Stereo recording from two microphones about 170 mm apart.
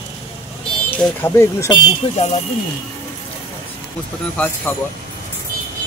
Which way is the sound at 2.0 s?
30° left (ahead or behind).